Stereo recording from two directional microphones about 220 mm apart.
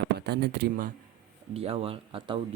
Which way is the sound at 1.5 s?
25° right (ahead or behind).